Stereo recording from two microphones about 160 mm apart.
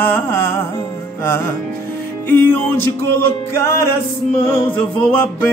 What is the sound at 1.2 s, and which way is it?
Music, 15° left (ahead or behind).